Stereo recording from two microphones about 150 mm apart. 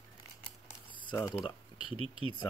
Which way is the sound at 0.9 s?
35° left (ahead or behind).